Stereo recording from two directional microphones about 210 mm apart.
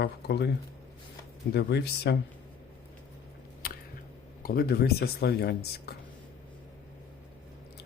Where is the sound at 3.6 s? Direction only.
45° left (ahead or behind).